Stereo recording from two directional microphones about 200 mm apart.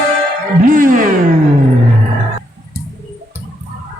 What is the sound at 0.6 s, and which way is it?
Music, 45° right (ahead or behind).